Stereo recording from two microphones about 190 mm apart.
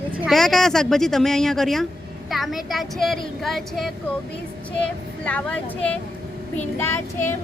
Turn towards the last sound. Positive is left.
turn(degrees=15)  # may be behind; listen again after turning